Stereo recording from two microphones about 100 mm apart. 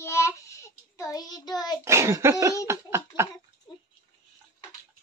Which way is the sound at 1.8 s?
30° right (ahead or behind).